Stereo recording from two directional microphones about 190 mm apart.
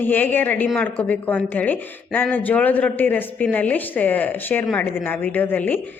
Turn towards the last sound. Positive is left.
turn(degrees=10)  # may be behind; listen again after turning